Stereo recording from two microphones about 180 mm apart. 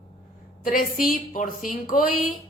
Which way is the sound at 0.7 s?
50° left (ahead or behind).